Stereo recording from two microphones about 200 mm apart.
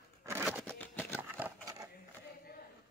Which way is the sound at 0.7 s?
10° left (ahead or behind).